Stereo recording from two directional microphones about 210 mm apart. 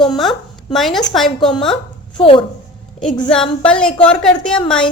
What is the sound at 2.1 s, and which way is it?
Speech, 25° left (ahead or behind).